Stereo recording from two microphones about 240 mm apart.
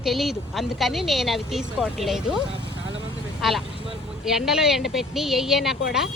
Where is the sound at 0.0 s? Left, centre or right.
Centre.